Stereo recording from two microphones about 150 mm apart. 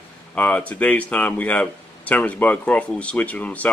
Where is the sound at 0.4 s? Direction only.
10° left (ahead or behind).